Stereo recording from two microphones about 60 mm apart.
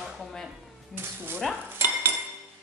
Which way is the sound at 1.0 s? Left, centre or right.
Right.